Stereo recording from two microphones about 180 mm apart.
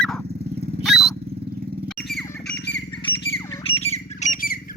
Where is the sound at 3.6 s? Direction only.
35° left (ahead or behind); by 4.7 s 50° left (ahead or behind).